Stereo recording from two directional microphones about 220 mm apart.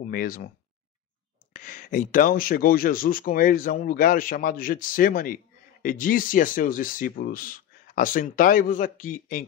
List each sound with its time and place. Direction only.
0.1 s speech: 40° left (ahead or behind)
1.5 s speech: 35° left (ahead or behind)